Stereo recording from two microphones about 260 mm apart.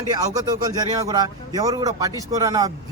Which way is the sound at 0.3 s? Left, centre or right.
Centre.